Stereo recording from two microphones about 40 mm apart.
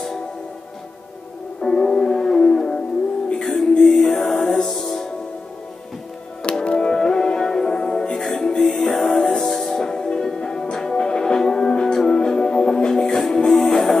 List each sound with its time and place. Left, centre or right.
1.6 s music: centre
6.6 s music: left